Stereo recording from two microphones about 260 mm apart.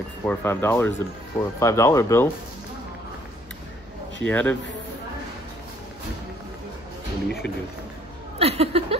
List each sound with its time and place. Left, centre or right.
0.2 s speech: centre
4.2 s a man's voice: centre
8.4 s a sound: right